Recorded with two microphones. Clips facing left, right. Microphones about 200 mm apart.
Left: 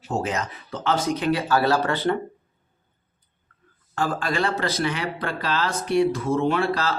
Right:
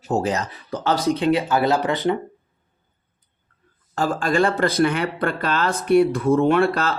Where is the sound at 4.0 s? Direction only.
45° right (ahead or behind).